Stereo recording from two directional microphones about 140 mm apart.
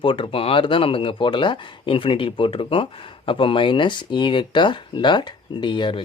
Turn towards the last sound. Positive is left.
turn(degrees=35)  # may be behind; listen again after turning